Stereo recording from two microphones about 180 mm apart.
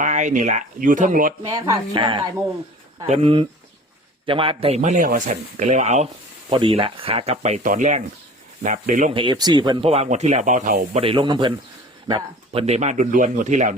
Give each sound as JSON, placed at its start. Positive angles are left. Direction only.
{"t": 0.0, "sound": "speech", "side_deg": -40}
{"t": 1.4, "sound": "speech", "side_deg": -20}
{"t": 6.5, "sound": "speech", "side_deg": -30}
{"t": 9.1, "sound": "speech", "side_deg": -25}
{"t": 11.0, "sound": "speech", "side_deg": -30}
{"t": 12.6, "sound": "speech", "side_deg": -40}